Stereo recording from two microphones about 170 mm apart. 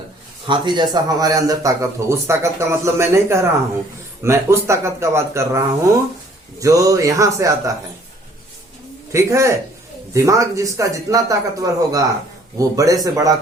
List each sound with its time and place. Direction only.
0.4 s a man's voice: 25° right (ahead or behind)
9.1 s a man's voice: 15° right (ahead or behind)